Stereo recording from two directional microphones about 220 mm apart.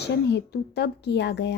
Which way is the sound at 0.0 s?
50° left (ahead or behind).